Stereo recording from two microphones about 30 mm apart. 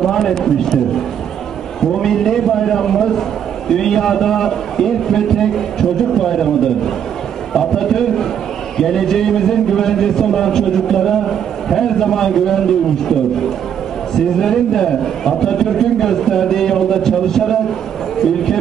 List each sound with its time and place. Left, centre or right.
0.0 s a man's voice: centre